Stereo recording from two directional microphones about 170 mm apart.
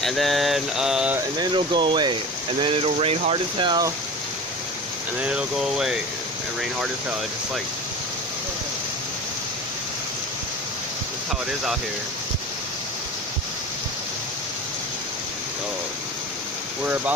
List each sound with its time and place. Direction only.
0.0 s mantra: centre (ahead or behind)
1.4 s speech: 25° right (ahead or behind)
5.2 s mantra: 5° right (ahead or behind)
16.8 s speech: 10° right (ahead or behind)